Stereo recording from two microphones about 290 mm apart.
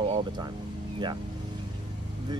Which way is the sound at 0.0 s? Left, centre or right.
Centre.